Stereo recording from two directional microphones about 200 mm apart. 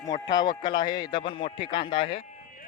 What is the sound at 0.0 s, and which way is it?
A man's voice, 20° left (ahead or behind).